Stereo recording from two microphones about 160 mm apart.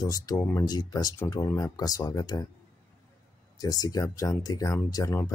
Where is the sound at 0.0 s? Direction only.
20° left (ahead or behind).